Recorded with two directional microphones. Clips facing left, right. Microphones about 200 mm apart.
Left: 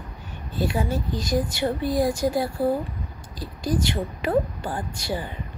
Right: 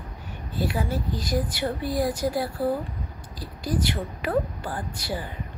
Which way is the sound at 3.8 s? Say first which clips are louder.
Left 2 dB; 25° left (ahead or behind).